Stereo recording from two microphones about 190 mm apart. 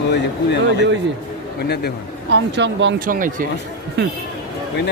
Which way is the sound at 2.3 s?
70° right (ahead or behind).